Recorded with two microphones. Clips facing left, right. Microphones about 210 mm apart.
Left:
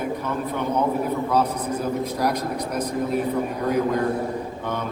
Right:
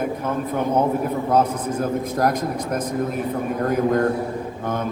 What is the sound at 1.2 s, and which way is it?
A man's voice, 50° right (ahead or behind).